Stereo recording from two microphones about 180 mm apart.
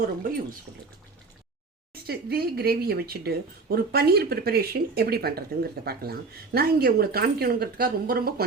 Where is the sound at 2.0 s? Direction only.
60° right (ahead or behind).